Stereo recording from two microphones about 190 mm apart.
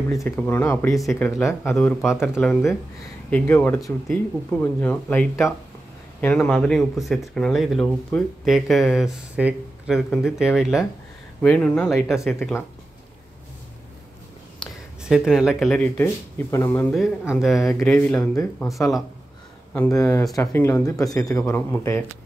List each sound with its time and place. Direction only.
0.2 s speech: 10° left (ahead or behind)
14.6 s speech: centre (ahead or behind); by 16.8 s 15° left (ahead or behind)
17.3 s speech: centre (ahead or behind)
17.6 s speech: 15° left (ahead or behind); by 19.0 s centre (ahead or behind)
19.7 s speech: 15° left (ahead or behind)